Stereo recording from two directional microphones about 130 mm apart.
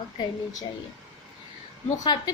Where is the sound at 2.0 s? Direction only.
35° left (ahead or behind).